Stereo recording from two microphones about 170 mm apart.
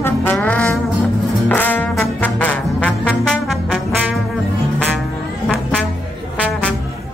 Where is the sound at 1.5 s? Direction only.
10° left (ahead or behind).